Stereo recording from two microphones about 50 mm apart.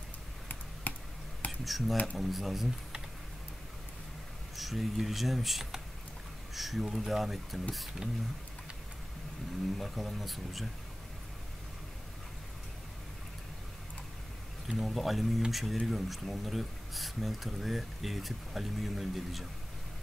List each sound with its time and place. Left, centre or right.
0.9 s a sound: left
1.6 s speech: centre
4.6 s speech: centre
8.0 s speech: centre
9.8 s speech: centre
14.8 s speech: centre